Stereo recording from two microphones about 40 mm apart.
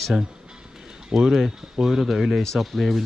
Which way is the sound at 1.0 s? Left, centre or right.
Centre.